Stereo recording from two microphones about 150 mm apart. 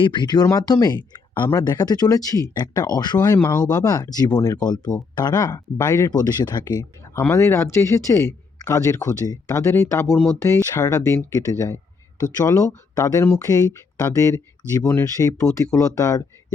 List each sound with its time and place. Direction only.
0.0 s speech: 30° left (ahead or behind)